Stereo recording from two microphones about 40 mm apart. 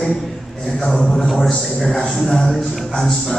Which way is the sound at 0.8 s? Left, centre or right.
Centre.